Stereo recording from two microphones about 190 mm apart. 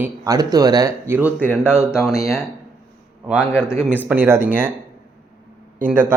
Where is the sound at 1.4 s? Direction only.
10° left (ahead or behind).